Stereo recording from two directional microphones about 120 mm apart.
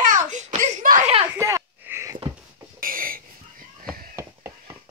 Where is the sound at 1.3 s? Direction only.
20° right (ahead or behind).